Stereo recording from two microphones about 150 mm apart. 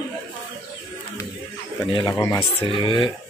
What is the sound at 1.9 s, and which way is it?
Speech, 25° left (ahead or behind).